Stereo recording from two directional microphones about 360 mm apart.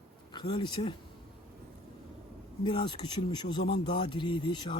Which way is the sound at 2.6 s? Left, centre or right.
Centre.